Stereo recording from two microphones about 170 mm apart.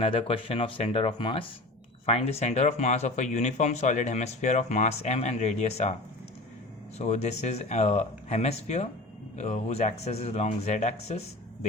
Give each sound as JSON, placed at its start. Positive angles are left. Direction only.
{"t": 0.0, "sound": "speech", "side_deg": 30}
{"t": 7.0, "sound": "speech", "side_deg": 40}